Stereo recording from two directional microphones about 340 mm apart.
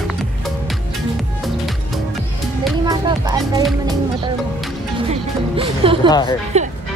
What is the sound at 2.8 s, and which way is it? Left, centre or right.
Speech, centre.